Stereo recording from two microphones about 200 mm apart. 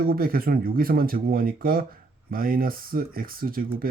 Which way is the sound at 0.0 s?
45° right (ahead or behind).